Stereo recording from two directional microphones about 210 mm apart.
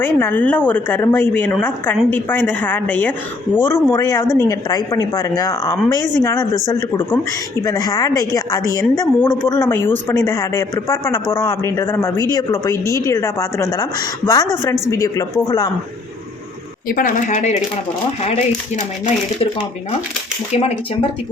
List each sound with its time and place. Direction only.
0.0 s a woman's voice: 10° left (ahead or behind)
16.9 s speech: 40° left (ahead or behind)
20.5 s speech: 30° left (ahead or behind)